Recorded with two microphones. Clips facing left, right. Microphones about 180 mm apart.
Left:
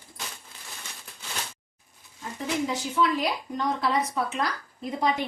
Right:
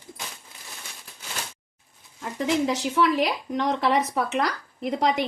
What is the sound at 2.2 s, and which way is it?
A woman's voice, 80° right.